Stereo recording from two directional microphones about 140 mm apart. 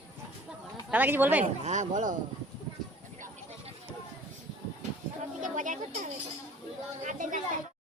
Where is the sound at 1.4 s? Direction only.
60° right (ahead or behind).